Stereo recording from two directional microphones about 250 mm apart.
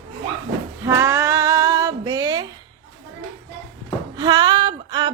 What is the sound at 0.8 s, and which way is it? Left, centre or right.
Female singing, centre.